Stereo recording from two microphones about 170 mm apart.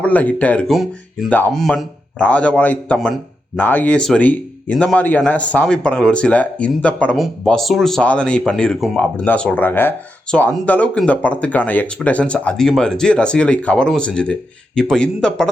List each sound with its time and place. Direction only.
0.0 s a man's voice: 10° left (ahead or behind)